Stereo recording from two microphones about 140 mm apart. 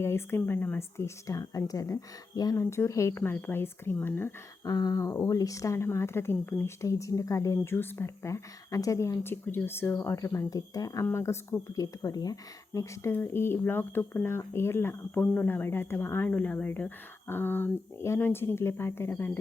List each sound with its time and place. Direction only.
0.0 s a woman's voice: 15° left (ahead or behind)